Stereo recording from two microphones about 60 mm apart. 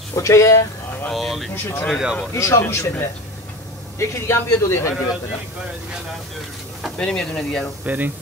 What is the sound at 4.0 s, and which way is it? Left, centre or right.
Speech, left.